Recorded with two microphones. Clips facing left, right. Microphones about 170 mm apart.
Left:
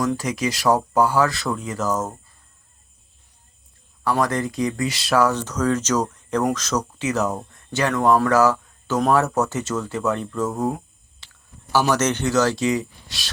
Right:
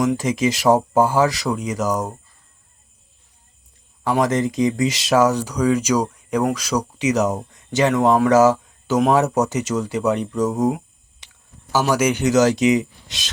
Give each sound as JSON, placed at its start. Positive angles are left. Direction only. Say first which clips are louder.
{"t": 0.0, "sound": "speech", "louder": "right 4 dB", "side_deg": -20}
{"t": 4.0, "sound": "speech", "louder": "right 3 dB", "side_deg": -20}